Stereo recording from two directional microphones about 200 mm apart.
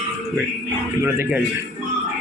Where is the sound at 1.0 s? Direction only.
10° right (ahead or behind).